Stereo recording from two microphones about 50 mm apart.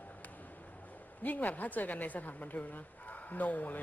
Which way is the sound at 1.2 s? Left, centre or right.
Left.